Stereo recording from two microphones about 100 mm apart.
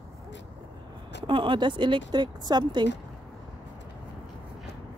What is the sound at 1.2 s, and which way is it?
Speech, 55° right (ahead or behind).